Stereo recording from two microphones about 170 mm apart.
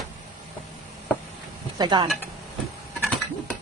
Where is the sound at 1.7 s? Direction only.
25° right (ahead or behind).